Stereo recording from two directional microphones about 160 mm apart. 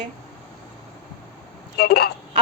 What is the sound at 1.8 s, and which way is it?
Speech, 85° left.